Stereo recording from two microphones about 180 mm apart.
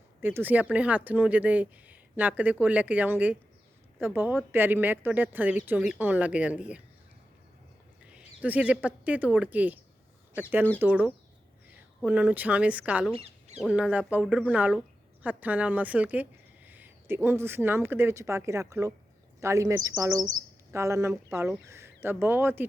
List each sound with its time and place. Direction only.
0.2 s speech: 10° right (ahead or behind)
8.1 s speech: 10° right (ahead or behind)
10.8 s speech: 10° right (ahead or behind)
13.1 s a sound: 35° right (ahead or behind)
13.6 s speech: 5° right (ahead or behind)